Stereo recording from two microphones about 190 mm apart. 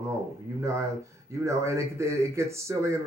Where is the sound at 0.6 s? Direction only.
15° right (ahead or behind).